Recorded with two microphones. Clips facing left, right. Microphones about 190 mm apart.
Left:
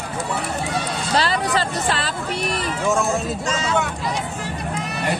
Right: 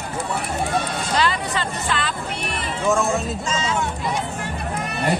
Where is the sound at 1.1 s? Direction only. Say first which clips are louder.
Left 2 dB; 35° left (ahead or behind).